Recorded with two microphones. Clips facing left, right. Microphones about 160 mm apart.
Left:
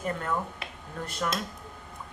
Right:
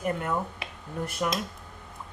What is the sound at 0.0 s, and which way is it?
A woman's voice, 15° right (ahead or behind).